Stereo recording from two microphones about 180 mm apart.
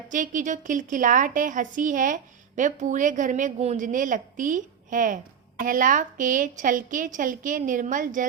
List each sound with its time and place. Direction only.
0.1 s a woman's voice: 45° right (ahead or behind)